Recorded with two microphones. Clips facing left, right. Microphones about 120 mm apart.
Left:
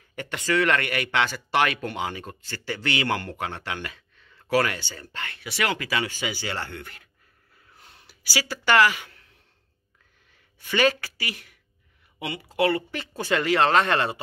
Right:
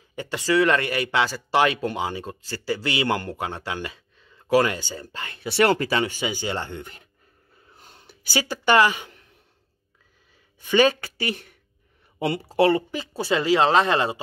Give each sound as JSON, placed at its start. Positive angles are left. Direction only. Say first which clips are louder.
{"t": 0.1, "sound": "speech", "louder": "right 3 dB", "side_deg": -25}
{"t": 0.5, "sound": "speech", "louder": "right 3 dB", "side_deg": -15}
{"t": 0.7, "sound": "speech", "louder": "right 2 dB", "side_deg": -30}
{"t": 1.2, "sound": "speech", "louder": "right 3 dB", "side_deg": -15}
{"t": 5.3, "sound": "speech", "louder": "right 8 dB", "side_deg": -30}
{"t": 6.0, "sound": "speech", "louder": "right 4 dB", "side_deg": -15}
{"t": 7.7, "sound": "a sound", "louder": "right 3 dB", "side_deg": -30}
{"t": 10.6, "sound": "speech", "louder": "right 4 dB", "side_deg": -20}
{"t": 13.2, "sound": "speech", "louder": "right 2 dB", "side_deg": -10}